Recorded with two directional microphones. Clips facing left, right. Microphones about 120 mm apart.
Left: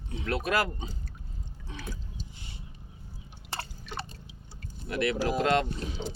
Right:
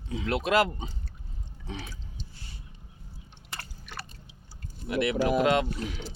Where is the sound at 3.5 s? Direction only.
25° left (ahead or behind).